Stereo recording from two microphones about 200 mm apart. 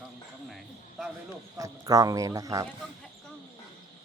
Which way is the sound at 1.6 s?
20° right (ahead or behind).